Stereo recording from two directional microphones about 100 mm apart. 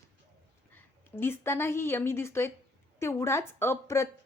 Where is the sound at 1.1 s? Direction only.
25° left (ahead or behind).